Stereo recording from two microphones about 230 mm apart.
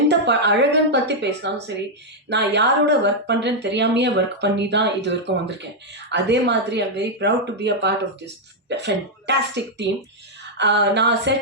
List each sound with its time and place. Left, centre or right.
0.1 s speech: right